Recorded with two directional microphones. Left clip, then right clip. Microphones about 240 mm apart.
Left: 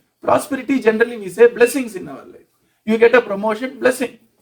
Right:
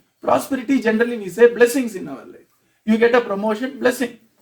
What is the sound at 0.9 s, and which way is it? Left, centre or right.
Speech, left.